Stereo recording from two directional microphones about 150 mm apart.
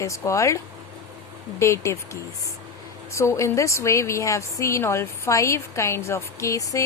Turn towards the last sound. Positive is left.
turn(degrees=20)  # may be behind; listen again after turning